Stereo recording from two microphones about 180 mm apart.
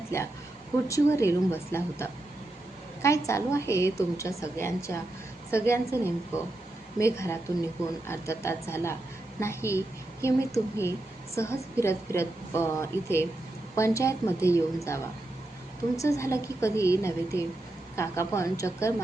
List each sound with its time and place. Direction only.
0.1 s a woman's voice: 15° left (ahead or behind)